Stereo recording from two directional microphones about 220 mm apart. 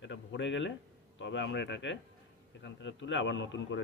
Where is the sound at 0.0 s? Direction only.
55° left (ahead or behind).